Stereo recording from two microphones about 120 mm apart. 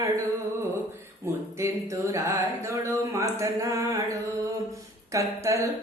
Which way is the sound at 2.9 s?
25° right (ahead or behind).